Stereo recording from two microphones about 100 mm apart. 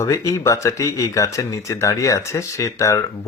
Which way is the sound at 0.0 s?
30° left (ahead or behind).